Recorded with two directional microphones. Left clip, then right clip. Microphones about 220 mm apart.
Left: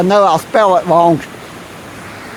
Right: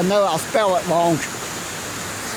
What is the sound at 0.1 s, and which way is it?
Speech, 40° left (ahead or behind).